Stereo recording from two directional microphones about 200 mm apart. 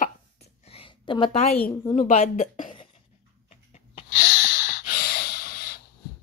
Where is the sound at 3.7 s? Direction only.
45° left (ahead or behind).